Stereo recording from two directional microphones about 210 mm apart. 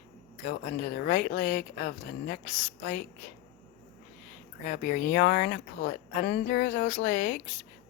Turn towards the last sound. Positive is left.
turn(degrees=40)  # may be behind; listen again after turning